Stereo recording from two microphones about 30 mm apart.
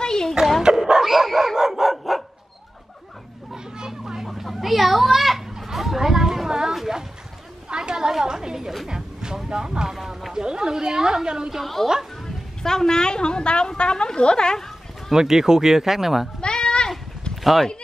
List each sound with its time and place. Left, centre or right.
0.0 s dog: left
0.7 s dog: right
1.0 s dog: centre
3.5 s children playing: right
4.0 s a sound: centre
4.3 s children playing: centre
5.6 s a sound: centre
7.7 s a sound: right
11.6 s music: centre
12.6 s a sound: centre
15.1 s speech: centre
16.3 s goat: left
17.4 s speech: centre